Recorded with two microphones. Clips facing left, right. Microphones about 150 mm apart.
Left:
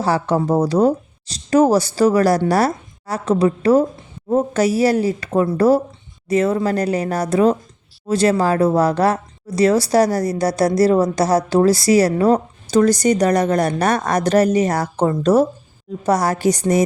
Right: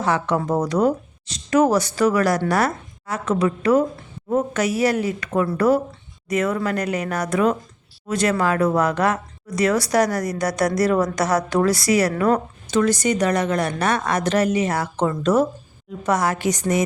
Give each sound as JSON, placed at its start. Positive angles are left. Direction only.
{"t": 0.0, "sound": "a woman's voice", "side_deg": 35}